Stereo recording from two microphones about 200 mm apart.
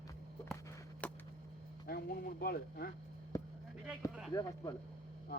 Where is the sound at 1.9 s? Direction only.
50° left (ahead or behind).